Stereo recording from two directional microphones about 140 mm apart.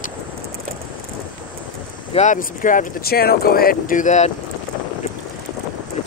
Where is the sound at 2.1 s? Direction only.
65° left (ahead or behind).